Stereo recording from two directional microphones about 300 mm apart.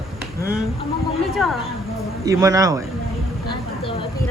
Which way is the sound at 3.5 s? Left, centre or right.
Centre.